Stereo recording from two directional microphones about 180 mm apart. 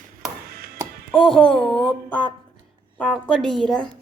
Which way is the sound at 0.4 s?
60° right (ahead or behind).